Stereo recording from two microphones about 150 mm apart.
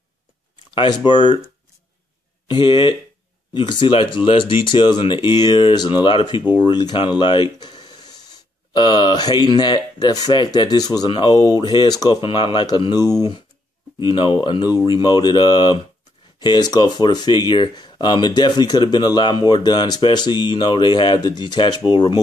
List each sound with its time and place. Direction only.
0.7 s speech: 30° left (ahead or behind)
2.4 s speech: 30° left (ahead or behind)